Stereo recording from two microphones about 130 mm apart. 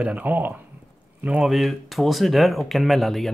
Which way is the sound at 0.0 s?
10° right (ahead or behind).